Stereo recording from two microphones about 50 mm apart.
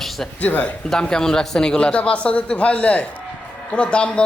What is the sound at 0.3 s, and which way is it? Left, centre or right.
Speech, left.